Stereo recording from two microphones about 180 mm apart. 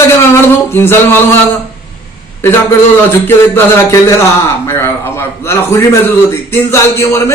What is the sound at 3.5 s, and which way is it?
A man's voice, 10° left (ahead or behind).